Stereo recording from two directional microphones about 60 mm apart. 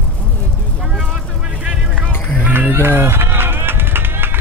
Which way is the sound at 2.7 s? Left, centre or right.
Right.